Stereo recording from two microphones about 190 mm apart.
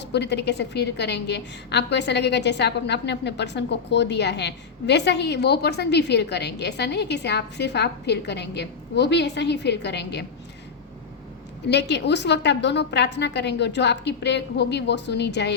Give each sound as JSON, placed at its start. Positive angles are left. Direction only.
{"t": 0.1, "sound": "a woman's voice", "side_deg": 65}
{"t": 11.7, "sound": "a woman's voice", "side_deg": 65}